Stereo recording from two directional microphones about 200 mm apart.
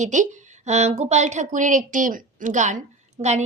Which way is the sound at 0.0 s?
35° right (ahead or behind).